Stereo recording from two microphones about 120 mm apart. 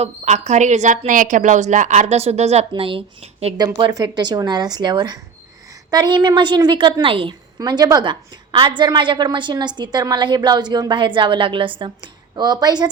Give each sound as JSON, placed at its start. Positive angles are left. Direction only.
{"t": 0.0, "sound": "a woman's voice", "side_deg": -70}
{"t": 3.6, "sound": "a woman's voice", "side_deg": -35}
{"t": 7.6, "sound": "a woman's voice", "side_deg": -35}
{"t": 12.4, "sound": "a woman's voice", "side_deg": -35}